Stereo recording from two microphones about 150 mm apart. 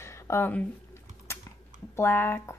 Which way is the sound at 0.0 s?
20° left (ahead or behind).